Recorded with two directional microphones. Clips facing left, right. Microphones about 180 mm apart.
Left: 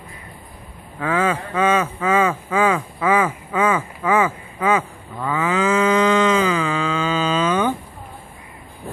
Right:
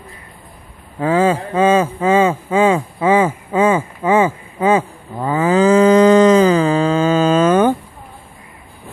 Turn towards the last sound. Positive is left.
turn(degrees=-50)  # may be behind; listen again after turning